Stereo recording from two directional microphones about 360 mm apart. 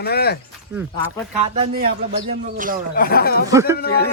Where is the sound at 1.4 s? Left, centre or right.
Centre.